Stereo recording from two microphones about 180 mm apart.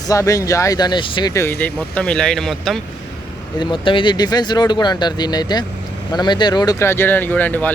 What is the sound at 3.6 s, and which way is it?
Speech, 25° left (ahead or behind).